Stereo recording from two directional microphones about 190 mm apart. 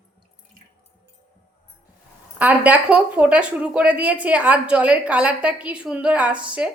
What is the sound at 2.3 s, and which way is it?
A woman's voice, 5° right (ahead or behind).